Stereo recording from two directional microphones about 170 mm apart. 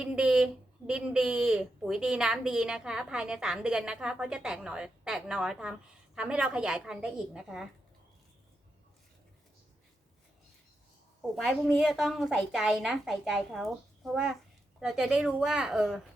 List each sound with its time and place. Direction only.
0.0 s speech: 5° right (ahead or behind)
11.3 s speech: centre (ahead or behind)